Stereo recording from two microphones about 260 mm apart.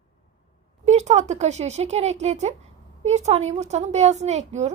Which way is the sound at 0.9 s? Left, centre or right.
Right.